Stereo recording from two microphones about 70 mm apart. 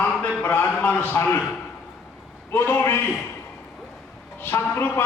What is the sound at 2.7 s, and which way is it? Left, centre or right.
Speech, left.